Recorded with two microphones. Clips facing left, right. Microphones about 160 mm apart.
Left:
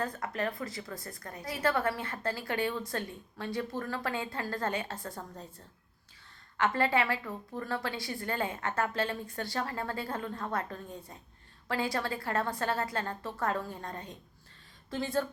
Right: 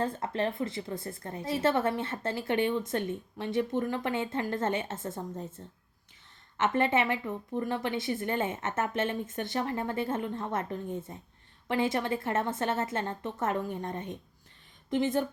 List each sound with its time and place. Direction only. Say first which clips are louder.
0.0 s a woman's voice: right 3 dB; 25° right (ahead or behind)